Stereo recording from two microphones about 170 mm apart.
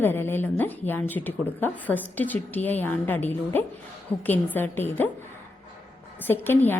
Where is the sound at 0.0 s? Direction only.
15° left (ahead or behind).